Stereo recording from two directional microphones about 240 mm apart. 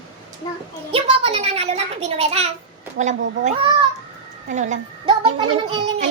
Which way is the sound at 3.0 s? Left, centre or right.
Right.